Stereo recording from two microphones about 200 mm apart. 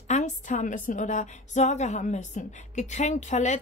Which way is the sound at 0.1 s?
40° left (ahead or behind).